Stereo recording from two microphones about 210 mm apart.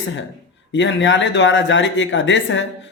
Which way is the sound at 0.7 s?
60° left (ahead or behind).